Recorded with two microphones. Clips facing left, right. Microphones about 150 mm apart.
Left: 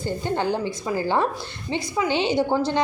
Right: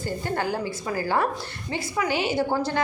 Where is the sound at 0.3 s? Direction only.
25° left (ahead or behind).